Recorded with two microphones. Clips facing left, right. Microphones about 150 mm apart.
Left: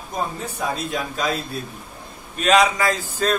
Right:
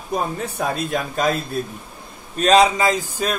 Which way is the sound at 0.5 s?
50° right (ahead or behind).